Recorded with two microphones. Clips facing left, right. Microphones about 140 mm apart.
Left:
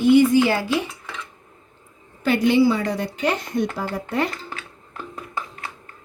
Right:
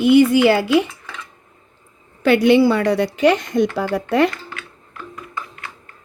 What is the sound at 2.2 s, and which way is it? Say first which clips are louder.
A woman's voice: right 4 dB; 75° right (ahead or behind).